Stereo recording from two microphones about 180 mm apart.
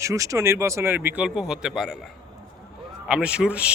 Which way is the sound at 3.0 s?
5° right (ahead or behind).